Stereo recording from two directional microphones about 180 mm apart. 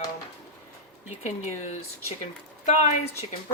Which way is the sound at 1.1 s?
40° left (ahead or behind).